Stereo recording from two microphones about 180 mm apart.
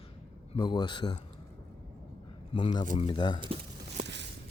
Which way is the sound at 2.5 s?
25° left (ahead or behind).